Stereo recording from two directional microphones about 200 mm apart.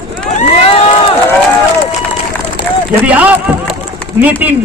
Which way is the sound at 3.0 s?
10° right (ahead or behind).